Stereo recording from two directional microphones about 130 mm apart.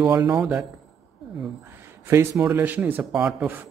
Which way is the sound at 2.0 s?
20° right (ahead or behind).